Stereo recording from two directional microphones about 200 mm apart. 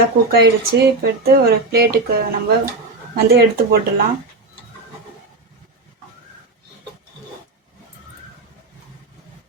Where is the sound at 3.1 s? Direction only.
50° right (ahead or behind).